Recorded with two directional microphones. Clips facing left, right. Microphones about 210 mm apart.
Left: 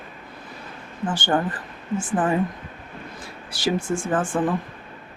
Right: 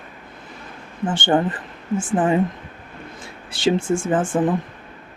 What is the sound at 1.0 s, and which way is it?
Speech, 25° right (ahead or behind).